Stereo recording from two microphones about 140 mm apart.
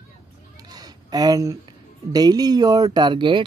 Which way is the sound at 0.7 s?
25° right (ahead or behind).